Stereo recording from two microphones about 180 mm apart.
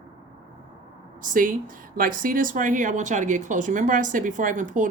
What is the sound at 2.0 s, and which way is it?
Speech, 50° right (ahead or behind).